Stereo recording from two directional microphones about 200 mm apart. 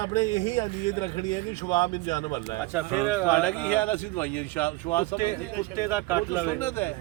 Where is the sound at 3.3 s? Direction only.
5° left (ahead or behind).